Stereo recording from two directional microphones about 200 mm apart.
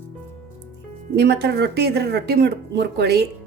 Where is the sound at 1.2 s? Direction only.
55° right (ahead or behind).